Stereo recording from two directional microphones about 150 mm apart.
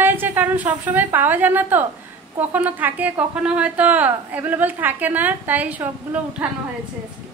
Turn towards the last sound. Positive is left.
turn(degrees=-10)  # may be behind; listen again after turning